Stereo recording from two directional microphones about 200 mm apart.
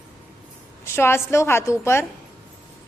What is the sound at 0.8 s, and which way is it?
A woman's voice, 10° left (ahead or behind).